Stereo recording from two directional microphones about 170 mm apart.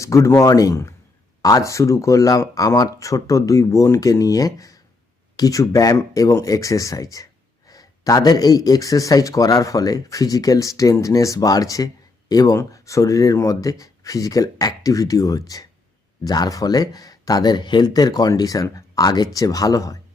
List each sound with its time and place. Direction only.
0.0 s speech: 20° left (ahead or behind)